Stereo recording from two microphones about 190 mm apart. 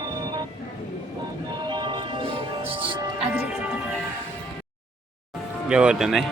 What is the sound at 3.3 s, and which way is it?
Music, 10° right (ahead or behind).